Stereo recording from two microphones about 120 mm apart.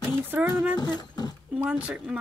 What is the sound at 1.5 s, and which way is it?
Speech, 10° right (ahead or behind).